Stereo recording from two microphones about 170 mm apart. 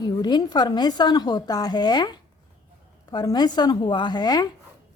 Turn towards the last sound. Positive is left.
turn(degrees=25)  # may be behind; listen again after turning